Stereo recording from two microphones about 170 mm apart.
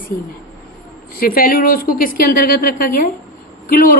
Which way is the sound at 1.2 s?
60° left (ahead or behind).